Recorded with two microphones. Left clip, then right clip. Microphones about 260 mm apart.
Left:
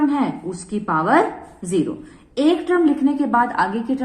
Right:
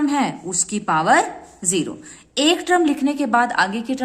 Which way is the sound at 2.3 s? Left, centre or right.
Right.